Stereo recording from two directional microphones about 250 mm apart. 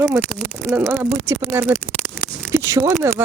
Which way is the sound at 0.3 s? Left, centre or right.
Centre.